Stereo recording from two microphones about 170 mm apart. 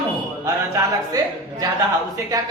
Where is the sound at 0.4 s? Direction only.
20° right (ahead or behind).